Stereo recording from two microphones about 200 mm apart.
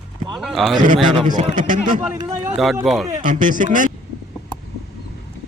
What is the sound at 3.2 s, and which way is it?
Speech, 40° right (ahead or behind).